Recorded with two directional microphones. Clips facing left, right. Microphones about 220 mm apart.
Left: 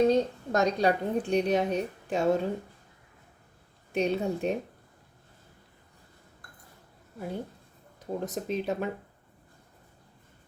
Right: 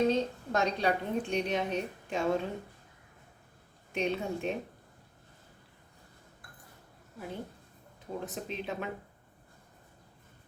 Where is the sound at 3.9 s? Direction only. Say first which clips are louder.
Left 5 dB; 40° left (ahead or behind).